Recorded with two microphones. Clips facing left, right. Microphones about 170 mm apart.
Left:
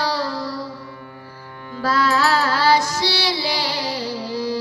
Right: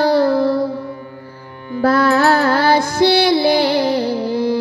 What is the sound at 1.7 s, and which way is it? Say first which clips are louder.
Music: right 6 dB; 55° right (ahead or behind).